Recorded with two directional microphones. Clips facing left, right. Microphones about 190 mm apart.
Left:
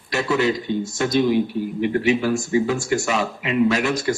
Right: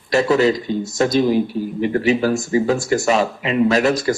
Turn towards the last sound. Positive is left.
turn(degrees=-35)  # may be behind; listen again after turning